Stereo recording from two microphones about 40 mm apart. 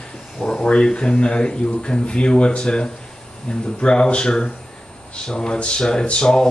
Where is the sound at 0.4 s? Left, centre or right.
Left.